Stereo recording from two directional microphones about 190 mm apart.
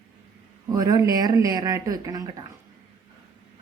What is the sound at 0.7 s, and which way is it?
Speech, 20° right (ahead or behind).